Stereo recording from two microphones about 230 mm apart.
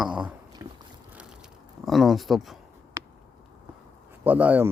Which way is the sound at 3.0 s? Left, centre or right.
Centre.